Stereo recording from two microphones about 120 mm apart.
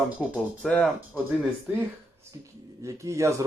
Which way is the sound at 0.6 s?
5° left (ahead or behind).